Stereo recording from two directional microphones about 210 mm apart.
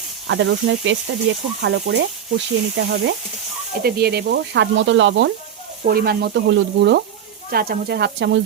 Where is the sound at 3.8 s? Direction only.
50° right (ahead or behind).